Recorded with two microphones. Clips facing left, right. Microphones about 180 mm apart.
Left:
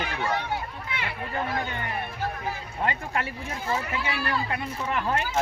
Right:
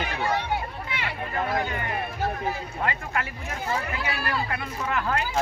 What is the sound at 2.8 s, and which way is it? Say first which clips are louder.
Speech: left 1 dB; 30° left (ahead or behind).